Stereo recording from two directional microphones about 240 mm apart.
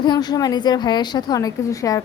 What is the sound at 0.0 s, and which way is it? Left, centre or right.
A woman's voice, centre.